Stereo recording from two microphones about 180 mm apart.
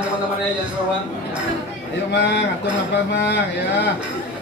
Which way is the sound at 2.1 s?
70° left (ahead or behind).